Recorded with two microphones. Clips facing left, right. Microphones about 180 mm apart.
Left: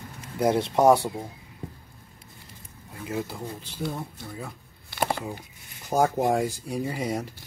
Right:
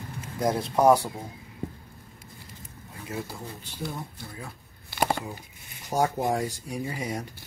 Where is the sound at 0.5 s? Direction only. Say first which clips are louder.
Left 3 dB; 25° left (ahead or behind).